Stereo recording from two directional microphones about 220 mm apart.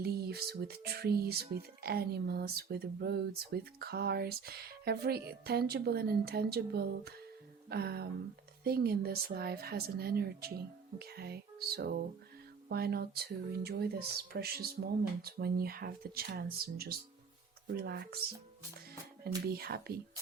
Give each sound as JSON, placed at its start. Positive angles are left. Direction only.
{"t": 0.0, "sound": "speech", "side_deg": -45}
{"t": 19.5, "sound": "speech", "side_deg": -45}